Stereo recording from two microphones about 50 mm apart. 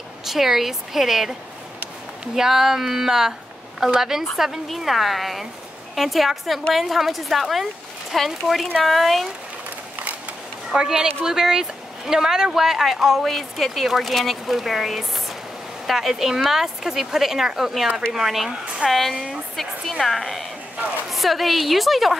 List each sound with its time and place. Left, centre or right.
0.2 s speech: centre
2.3 s speech: centre
9.9 s a sound: right
10.7 s speech: centre